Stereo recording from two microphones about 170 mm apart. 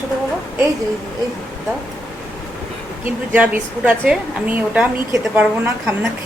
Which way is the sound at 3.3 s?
10° right (ahead or behind).